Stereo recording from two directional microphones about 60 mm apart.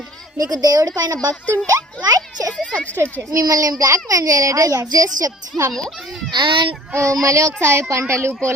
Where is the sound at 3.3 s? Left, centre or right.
Right.